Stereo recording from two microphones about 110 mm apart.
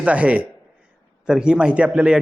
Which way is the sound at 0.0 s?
10° right (ahead or behind).